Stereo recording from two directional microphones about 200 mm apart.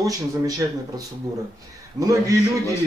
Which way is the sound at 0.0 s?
15° right (ahead or behind).